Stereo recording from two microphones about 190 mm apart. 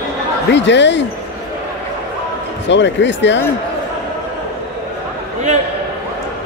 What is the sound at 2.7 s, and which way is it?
Speech, 70° left (ahead or behind).